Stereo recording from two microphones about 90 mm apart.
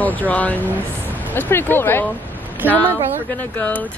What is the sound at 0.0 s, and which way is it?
Speech, 15° left (ahead or behind).